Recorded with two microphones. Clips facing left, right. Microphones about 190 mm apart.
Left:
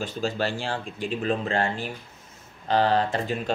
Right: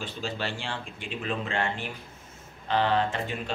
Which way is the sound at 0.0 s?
40° left (ahead or behind).